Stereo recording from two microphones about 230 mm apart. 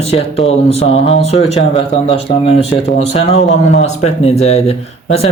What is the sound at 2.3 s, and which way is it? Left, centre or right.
Speech, left.